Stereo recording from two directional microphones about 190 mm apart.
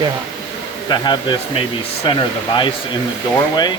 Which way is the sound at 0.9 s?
25° left (ahead or behind).